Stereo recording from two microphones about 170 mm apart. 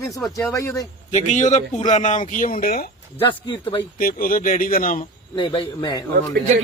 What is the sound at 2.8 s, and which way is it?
Speech, 30° left (ahead or behind).